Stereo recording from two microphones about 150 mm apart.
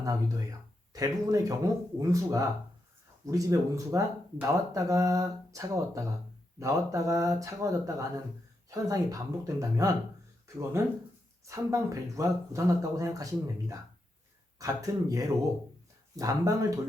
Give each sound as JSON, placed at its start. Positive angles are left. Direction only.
{"t": 0.0, "sound": "speech", "side_deg": -25}
{"t": 14.6, "sound": "speech", "side_deg": -20}